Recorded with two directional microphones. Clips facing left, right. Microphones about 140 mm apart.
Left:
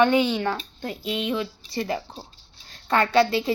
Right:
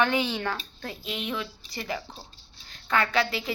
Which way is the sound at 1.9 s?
15° left (ahead or behind).